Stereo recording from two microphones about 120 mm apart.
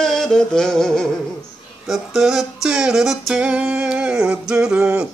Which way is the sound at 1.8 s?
5° right (ahead or behind).